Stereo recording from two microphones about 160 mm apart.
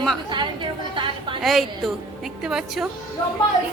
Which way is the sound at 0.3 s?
30° right (ahead or behind).